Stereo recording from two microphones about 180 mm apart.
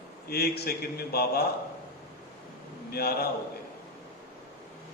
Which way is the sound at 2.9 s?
60° left (ahead or behind).